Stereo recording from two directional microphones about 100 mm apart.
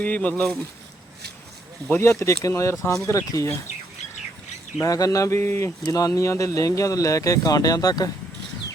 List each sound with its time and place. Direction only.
0.0 s speech: 15° left (ahead or behind)
1.9 s speech: 30° left (ahead or behind)
4.8 s speech: 35° left (ahead or behind)